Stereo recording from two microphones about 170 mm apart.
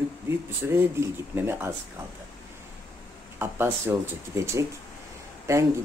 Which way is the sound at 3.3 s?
10° right (ahead or behind).